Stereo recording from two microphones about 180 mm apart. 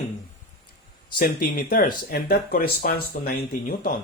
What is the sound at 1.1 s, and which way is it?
Speech, 50° left (ahead or behind).